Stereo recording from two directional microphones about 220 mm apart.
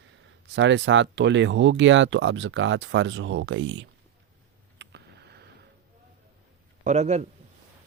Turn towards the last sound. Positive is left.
turn(degrees=-30)  # may be behind; listen again after turning